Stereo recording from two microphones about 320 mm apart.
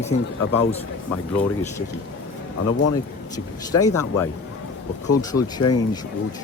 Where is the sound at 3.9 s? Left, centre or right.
Left.